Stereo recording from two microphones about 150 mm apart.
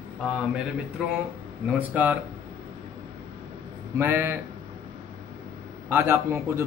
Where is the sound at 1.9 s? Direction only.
10° right (ahead or behind).